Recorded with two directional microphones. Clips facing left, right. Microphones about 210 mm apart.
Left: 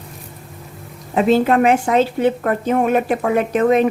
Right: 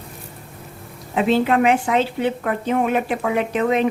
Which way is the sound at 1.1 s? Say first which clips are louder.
Left 3 dB; 45° left (ahead or behind).